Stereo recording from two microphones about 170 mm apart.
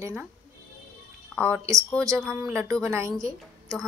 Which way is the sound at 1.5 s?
20° right (ahead or behind).